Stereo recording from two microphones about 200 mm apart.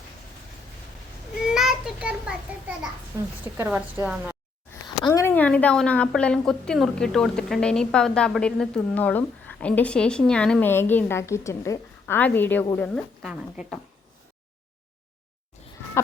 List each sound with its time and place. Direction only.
1.5 s a child's voice: centre (ahead or behind)
3.1 s a woman's voice: 15° right (ahead or behind)
3.6 s a woman's voice: 5° right (ahead or behind)
5.0 s a woman's voice: 15° left (ahead or behind)
13.2 s a woman's voice: 5° right (ahead or behind)